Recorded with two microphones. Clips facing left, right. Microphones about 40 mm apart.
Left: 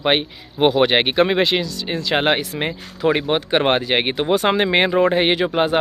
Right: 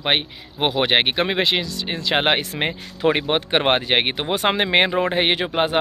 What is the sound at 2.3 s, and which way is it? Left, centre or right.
Speech, right.